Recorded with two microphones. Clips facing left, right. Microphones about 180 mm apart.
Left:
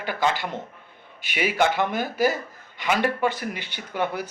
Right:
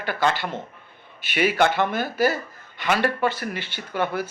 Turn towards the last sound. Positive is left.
turn(degrees=15)  # may be behind; listen again after turning